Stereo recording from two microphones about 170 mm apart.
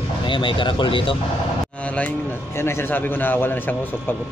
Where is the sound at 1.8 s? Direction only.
10° left (ahead or behind).